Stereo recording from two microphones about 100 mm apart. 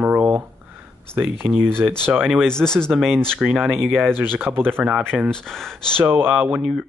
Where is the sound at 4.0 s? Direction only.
20° right (ahead or behind).